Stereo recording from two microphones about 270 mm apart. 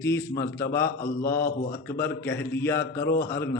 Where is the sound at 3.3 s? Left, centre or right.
Centre.